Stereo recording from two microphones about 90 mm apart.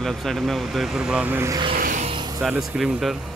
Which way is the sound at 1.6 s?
80° right.